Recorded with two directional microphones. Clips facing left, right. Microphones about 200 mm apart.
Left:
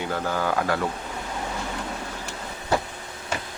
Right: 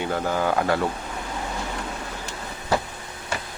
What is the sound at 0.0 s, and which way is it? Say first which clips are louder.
Speech: right 2 dB; 20° right (ahead or behind).